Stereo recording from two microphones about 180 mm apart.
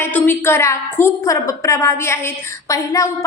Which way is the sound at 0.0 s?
10° left (ahead or behind).